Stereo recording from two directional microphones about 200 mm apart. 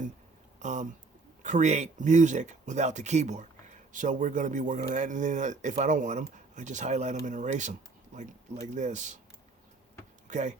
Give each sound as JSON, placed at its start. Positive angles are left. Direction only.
{"t": 0.6, "sound": "speech", "side_deg": -35}
{"t": 10.2, "sound": "speech", "side_deg": -35}